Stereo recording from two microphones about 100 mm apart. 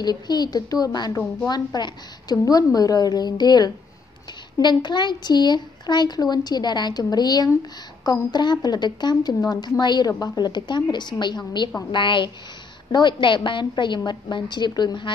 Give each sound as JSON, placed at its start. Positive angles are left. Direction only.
{"t": 0.0, "sound": "a woman's voice", "side_deg": 45}